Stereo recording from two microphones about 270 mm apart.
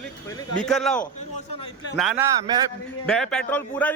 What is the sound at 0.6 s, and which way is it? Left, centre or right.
Speech, centre.